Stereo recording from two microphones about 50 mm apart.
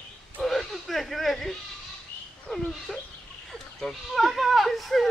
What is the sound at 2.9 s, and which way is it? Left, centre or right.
Fowl, centre.